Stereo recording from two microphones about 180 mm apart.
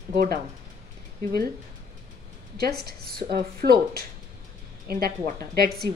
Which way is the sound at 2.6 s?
60° right (ahead or behind).